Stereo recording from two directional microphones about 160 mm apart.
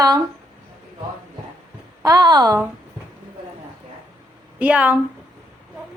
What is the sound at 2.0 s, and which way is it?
Speech, 25° right (ahead or behind).